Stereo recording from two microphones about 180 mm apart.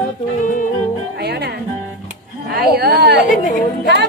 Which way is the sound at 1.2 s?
65° right (ahead or behind).